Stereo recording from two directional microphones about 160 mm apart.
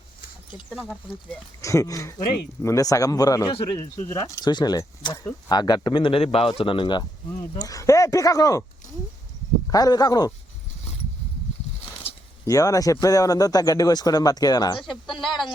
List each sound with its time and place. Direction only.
1.6 s a man's voice: 20° left (ahead or behind)
7.6 s a man's voice: 20° left (ahead or behind)
9.6 s a man's voice: 25° left (ahead or behind)
12.5 s a man's voice: 20° left (ahead or behind)
14.8 s speech: centre (ahead or behind)